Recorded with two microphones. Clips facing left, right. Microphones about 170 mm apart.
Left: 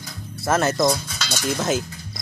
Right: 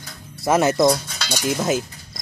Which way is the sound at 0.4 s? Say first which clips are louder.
Right 3 dB; 15° right (ahead or behind).